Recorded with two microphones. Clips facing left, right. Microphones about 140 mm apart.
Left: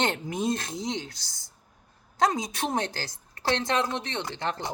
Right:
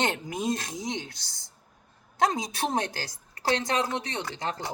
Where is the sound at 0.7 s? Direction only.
15° right (ahead or behind).